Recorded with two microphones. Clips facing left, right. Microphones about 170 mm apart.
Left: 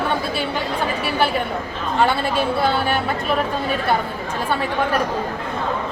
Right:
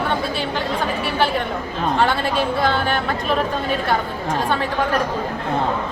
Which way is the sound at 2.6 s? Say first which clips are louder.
Even; 5° left (ahead or behind).